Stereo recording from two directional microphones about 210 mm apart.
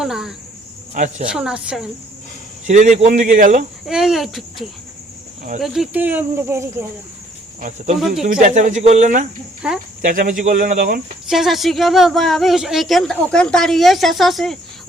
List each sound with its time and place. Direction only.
0.0 s speech: centre (ahead or behind)
0.9 s speech: 35° right (ahead or behind)
1.3 s speech: 5° right (ahead or behind)
2.6 s speech: 35° right (ahead or behind)
3.8 s speech: centre (ahead or behind)
8.2 s speech: 35° right (ahead or behind)
9.6 s speech: 5° right (ahead or behind)
10.1 s speech: 40° right (ahead or behind)
11.3 s speech: centre (ahead or behind)